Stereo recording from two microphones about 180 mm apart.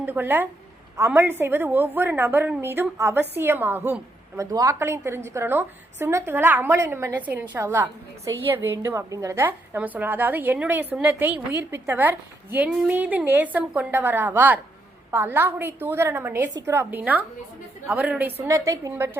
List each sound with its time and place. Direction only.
0.0 s a woman's voice: 10° right (ahead or behind)